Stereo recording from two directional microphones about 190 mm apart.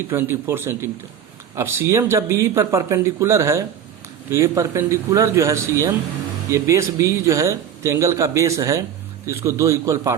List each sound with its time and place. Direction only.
0.1 s speech: 10° right (ahead or behind)